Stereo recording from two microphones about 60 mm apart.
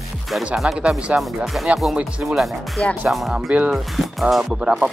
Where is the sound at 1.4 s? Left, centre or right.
Centre.